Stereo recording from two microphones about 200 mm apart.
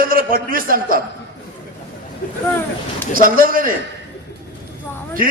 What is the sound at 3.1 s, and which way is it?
Speech, 45° right (ahead or behind).